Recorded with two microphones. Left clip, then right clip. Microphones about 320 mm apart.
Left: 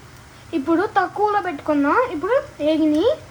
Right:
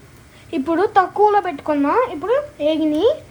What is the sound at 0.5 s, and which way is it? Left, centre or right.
Speech, right.